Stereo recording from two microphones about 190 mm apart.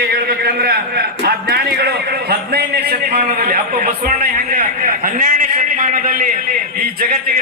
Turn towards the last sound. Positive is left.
turn(degrees=-50)  # may be behind; listen again after turning